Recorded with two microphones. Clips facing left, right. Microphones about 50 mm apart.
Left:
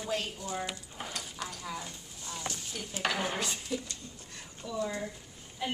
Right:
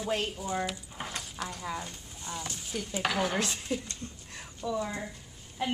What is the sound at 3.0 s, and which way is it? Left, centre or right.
Speech, centre.